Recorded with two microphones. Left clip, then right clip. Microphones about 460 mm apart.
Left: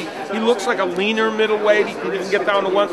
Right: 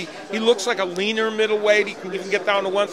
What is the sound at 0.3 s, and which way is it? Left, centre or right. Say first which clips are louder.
Speech: left 1 dB; right.